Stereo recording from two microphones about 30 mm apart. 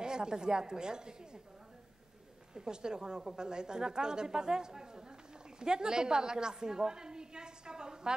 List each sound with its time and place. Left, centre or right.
0.0 s a woman's voice: right
2.5 s a woman's voice: right